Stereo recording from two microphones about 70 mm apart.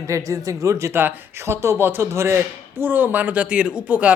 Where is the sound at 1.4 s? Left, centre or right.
Right.